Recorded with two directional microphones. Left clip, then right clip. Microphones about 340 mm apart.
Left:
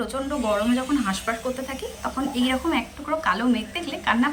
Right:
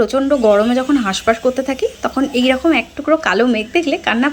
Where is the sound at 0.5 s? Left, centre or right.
Centre.